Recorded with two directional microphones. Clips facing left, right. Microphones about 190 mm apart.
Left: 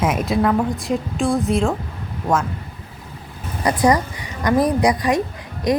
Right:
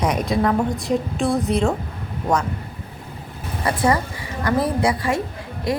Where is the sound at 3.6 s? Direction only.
15° left (ahead or behind).